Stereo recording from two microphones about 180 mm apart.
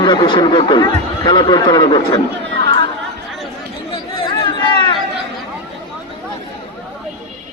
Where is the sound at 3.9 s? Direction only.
30° left (ahead or behind).